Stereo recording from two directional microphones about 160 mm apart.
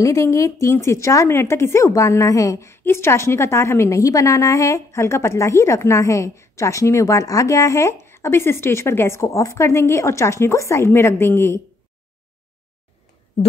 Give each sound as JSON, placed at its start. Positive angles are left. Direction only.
{"t": 0.0, "sound": "speech", "side_deg": 20}